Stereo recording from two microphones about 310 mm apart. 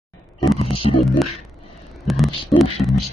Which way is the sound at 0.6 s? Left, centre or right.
Centre.